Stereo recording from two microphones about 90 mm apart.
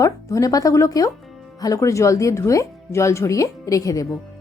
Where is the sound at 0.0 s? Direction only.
35° left (ahead or behind).